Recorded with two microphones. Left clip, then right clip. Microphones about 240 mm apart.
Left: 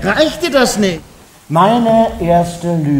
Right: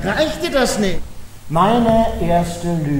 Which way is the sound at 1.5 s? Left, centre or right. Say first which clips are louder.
Left 4 dB; left.